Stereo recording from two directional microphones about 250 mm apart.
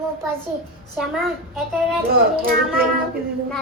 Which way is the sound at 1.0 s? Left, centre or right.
Centre.